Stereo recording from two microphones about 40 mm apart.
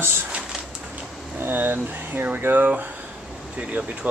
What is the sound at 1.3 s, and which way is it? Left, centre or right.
Speech, right.